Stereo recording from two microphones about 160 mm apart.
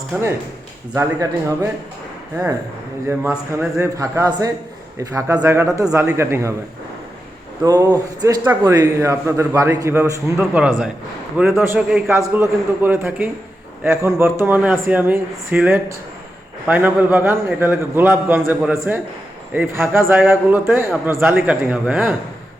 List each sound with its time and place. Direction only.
0.9 s speech: 20° right (ahead or behind)
3.1 s a man's voice: 15° right (ahead or behind)
7.6 s a man's voice: 20° right (ahead or behind)